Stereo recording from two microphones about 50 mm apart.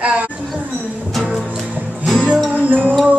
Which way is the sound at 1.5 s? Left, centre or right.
Centre.